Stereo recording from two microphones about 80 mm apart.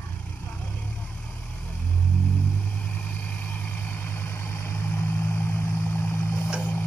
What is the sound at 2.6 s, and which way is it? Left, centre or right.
Vehicle, centre.